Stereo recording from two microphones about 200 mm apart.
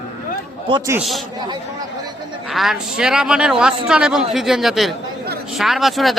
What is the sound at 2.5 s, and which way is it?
A man's voice, centre (ahead or behind).